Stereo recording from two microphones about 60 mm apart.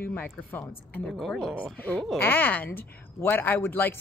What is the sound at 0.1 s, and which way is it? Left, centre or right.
Speech, left.